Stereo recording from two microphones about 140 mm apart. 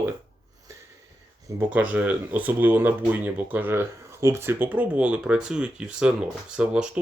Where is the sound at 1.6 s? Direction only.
10° right (ahead or behind).